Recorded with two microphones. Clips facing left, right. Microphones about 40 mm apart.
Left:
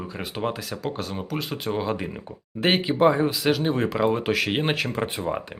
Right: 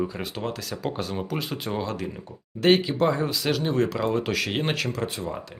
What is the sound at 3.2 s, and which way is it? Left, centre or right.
Speech, centre.